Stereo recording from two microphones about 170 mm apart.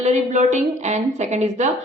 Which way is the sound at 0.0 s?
45° right (ahead or behind).